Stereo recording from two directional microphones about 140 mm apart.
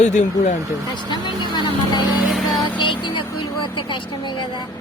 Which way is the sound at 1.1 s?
35° left (ahead or behind).